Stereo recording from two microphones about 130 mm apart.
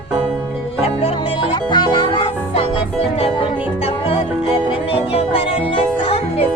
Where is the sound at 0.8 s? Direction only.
45° left (ahead or behind).